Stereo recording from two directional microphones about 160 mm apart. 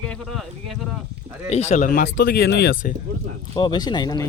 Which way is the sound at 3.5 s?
30° left (ahead or behind).